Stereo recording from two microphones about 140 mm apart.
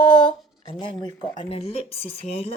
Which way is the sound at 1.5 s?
45° left (ahead or behind).